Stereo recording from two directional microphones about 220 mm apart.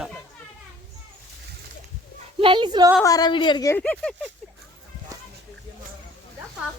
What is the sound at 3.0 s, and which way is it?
A woman's voice, 15° left (ahead or behind).